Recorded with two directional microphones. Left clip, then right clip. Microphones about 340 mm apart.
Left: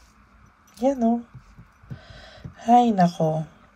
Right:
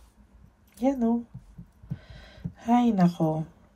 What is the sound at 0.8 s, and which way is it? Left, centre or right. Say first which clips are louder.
Speech: left 4 dB; centre.